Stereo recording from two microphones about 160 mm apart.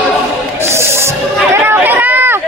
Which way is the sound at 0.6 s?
15° right (ahead or behind).